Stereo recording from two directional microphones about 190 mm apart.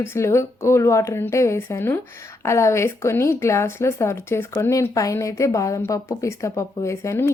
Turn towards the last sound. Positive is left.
turn(degrees=15)  # may be behind; listen again after turning